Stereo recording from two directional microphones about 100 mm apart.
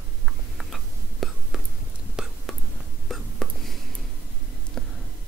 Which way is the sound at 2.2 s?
10° right (ahead or behind).